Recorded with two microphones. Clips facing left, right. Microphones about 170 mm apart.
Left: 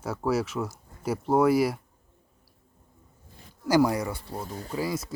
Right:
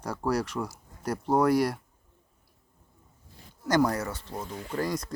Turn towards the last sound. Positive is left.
turn(degrees=5)  # may be behind; listen again after turning